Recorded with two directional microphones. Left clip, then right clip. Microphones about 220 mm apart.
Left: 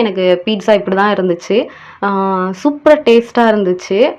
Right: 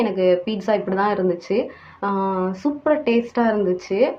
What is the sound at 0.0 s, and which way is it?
Speech, 30° left (ahead or behind).